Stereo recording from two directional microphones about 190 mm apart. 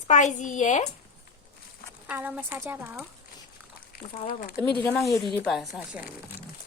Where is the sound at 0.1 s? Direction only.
40° left (ahead or behind).